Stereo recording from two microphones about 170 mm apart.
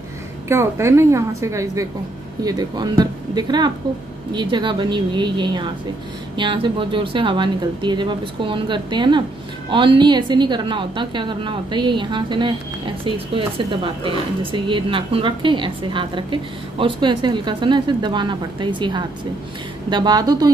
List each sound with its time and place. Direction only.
0.5 s a woman's voice: 15° right (ahead or behind)